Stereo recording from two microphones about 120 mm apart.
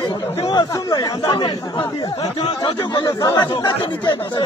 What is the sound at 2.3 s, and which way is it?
Speech, 45° left (ahead or behind).